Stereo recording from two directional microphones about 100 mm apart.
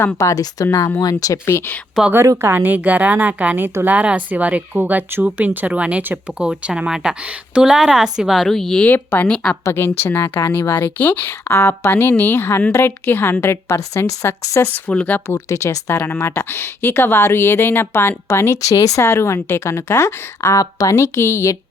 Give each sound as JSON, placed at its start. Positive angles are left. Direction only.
{"t": 0.2, "sound": "speech", "side_deg": 35}
{"t": 2.1, "sound": "a woman's voice", "side_deg": -30}
{"t": 2.5, "sound": "a woman's voice", "side_deg": -15}
{"t": 8.9, "sound": "speech", "side_deg": 15}
{"t": 9.6, "sound": "speech", "side_deg": 25}
{"t": 14.6, "sound": "speech", "side_deg": 15}
{"t": 15.4, "sound": "speech", "side_deg": 30}